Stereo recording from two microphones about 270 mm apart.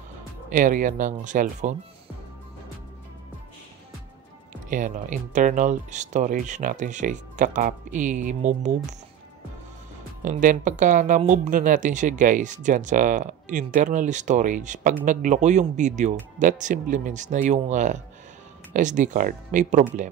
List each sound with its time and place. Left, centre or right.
0.5 s speech: right
4.6 s speech: right
10.2 s speech: right